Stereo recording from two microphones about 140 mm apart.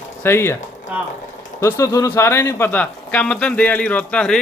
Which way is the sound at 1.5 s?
20° left (ahead or behind).